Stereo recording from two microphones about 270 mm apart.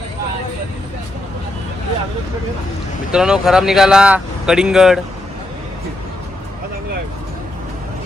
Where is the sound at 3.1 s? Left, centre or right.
Centre.